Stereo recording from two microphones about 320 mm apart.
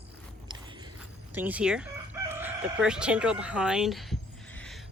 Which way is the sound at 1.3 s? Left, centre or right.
Centre.